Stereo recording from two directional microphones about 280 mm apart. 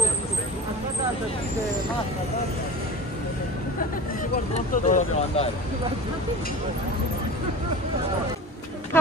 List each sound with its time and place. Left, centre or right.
4.8 s speech: left